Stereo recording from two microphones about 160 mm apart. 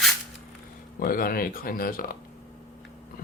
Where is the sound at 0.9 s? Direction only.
65° left (ahead or behind).